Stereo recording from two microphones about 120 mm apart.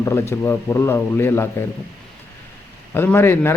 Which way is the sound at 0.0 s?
20° left (ahead or behind).